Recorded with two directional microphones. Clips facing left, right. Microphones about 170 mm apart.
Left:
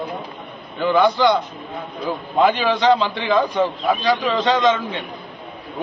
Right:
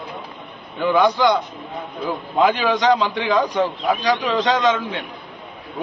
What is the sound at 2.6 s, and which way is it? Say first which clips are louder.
Speech: left 1 dB; 10° right (ahead or behind).